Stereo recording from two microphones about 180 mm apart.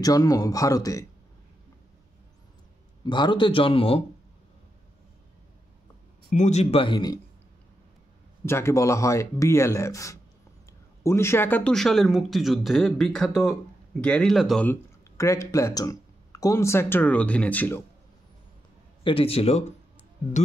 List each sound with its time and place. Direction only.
0.0 s speech: 20° left (ahead or behind)
3.1 s speech: 25° left (ahead or behind)
6.3 s speech: 40° left (ahead or behind)
8.5 s speech: 15° left (ahead or behind)
19.0 s speech: 30° left (ahead or behind)